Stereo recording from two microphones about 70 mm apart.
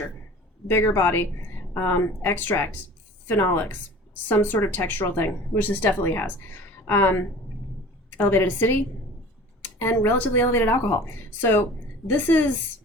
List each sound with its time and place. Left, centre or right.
0.7 s speech: left
12.1 s speech: left